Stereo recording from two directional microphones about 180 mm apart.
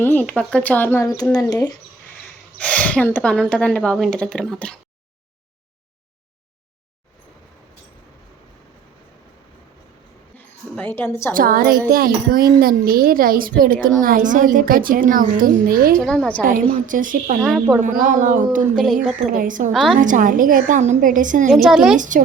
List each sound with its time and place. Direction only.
0.0 s speech: 10° left (ahead or behind)
2.6 s speech: 5° left (ahead or behind)
10.3 s a sound: 10° left (ahead or behind)
11.3 s a child's voice: 55° right (ahead or behind)
16.0 s speech: 5° left (ahead or behind)
16.4 s a child's voice: 50° right (ahead or behind)
17.4 s speech: centre (ahead or behind)
17.8 s a child's voice: 50° right (ahead or behind)
19.7 s speech: centre (ahead or behind)
20.0 s a child's voice: 45° right (ahead or behind)
21.5 s speech: centre (ahead or behind)
21.9 s a child's voice: 45° right (ahead or behind)